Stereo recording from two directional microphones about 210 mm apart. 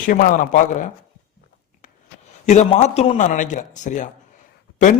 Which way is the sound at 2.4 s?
35° left (ahead or behind).